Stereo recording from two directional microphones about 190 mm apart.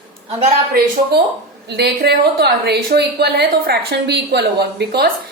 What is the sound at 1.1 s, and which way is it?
A woman's voice, 55° right (ahead or behind).